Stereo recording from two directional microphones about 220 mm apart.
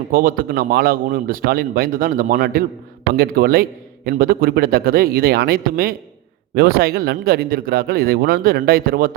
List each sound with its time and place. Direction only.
0.1 s a man's voice: 40° right (ahead or behind)